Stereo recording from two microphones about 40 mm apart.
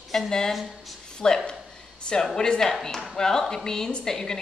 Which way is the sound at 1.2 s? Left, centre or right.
Centre.